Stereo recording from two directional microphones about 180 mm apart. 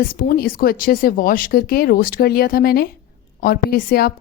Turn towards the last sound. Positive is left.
turn(degrees=55)  # may be behind; listen again after turning